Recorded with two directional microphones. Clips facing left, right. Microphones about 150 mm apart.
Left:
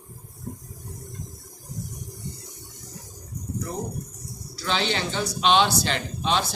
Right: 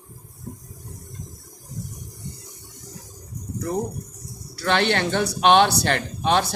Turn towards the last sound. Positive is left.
turn(degrees=-55)  # may be behind; listen again after turning